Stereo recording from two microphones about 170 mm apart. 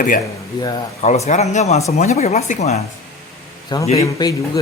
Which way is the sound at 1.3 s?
45° left (ahead or behind).